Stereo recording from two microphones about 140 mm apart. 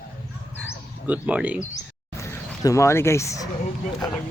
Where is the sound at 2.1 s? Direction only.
20° left (ahead or behind).